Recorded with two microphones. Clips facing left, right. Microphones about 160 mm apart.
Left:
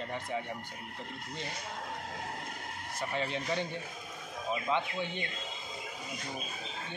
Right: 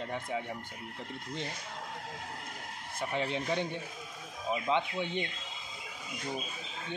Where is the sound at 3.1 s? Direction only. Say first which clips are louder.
Right 2 dB; 15° right (ahead or behind).